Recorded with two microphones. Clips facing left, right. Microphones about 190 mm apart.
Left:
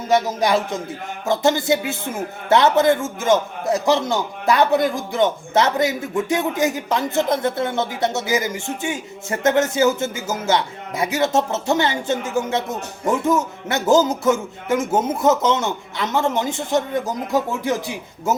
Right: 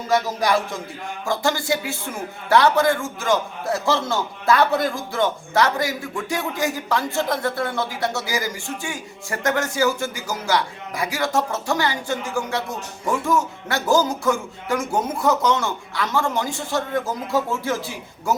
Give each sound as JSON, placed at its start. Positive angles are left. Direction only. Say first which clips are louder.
{"t": 0.1, "sound": "a man's voice", "louder": "left 2 dB", "side_deg": 20}